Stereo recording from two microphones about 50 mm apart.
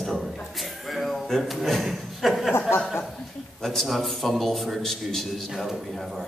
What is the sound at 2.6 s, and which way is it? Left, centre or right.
Chuckle, left.